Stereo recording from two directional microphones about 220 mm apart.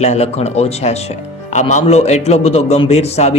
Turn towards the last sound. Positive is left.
turn(degrees=30)  # may be behind; listen again after turning